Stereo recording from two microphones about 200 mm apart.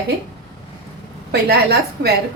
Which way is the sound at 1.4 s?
55° right (ahead or behind).